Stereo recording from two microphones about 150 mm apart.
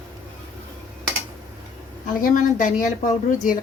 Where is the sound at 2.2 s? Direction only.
60° left (ahead or behind).